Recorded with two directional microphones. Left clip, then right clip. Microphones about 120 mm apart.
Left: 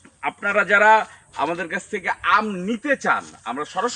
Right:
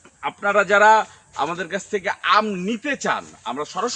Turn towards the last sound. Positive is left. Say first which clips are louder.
# left 1 dB
turn(degrees=15)  # may be behind; listen again after turning